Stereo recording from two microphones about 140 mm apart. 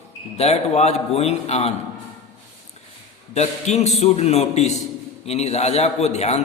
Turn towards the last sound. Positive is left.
turn(degrees=50)  # may be behind; listen again after turning